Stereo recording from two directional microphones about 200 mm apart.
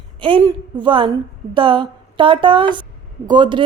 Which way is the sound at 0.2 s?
25° right (ahead or behind).